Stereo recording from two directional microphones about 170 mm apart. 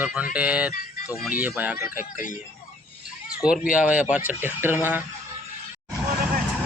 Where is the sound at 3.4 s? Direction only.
5° right (ahead or behind).